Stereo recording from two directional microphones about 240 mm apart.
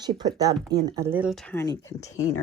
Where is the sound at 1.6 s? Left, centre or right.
Centre.